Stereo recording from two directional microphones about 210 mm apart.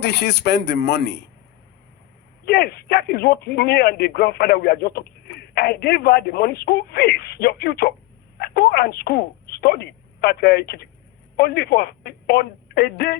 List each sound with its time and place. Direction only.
0.0 s speech: 55° left (ahead or behind)
2.4 s speech: 50° left (ahead or behind)